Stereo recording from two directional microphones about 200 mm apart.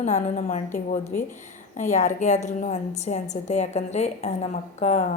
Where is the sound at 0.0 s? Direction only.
35° left (ahead or behind).